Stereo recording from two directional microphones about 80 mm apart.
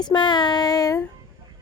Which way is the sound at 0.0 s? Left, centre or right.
Left.